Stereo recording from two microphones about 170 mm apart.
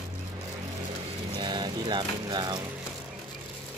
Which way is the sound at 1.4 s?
25° right (ahead or behind).